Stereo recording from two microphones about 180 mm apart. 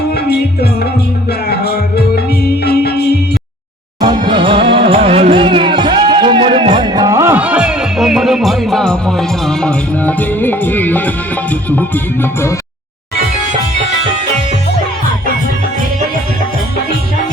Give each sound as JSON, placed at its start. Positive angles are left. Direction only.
{"t": 0.1, "sound": "music", "side_deg": 65}
{"t": 4.0, "sound": "music", "side_deg": -25}